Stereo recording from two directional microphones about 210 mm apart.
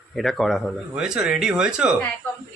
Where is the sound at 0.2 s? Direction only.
Centre (ahead or behind).